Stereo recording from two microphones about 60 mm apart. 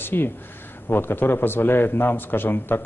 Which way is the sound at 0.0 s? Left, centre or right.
Left.